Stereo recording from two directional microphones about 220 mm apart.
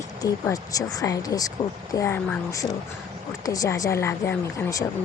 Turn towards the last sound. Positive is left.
turn(degrees=15)  # may be behind; listen again after turning